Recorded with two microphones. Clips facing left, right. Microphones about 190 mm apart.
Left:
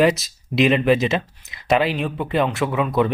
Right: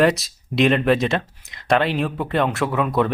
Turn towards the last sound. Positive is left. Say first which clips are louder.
# even
turn(degrees=0)  # may be behind; listen again after turning